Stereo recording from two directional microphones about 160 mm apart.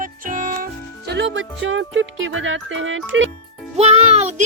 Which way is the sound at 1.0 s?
90° right.